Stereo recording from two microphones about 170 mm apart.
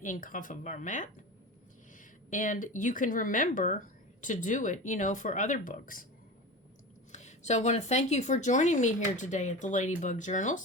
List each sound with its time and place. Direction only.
0.0 s speech: 50° left (ahead or behind)
7.1 s speech: 45° left (ahead or behind)